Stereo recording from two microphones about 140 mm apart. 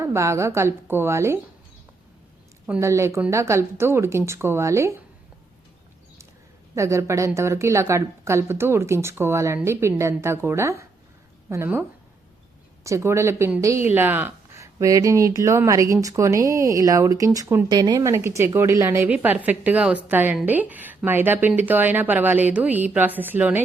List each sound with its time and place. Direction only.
0.0 s speech: 20° right (ahead or behind)
2.8 s speech: 20° right (ahead or behind)
6.7 s speech: 20° right (ahead or behind)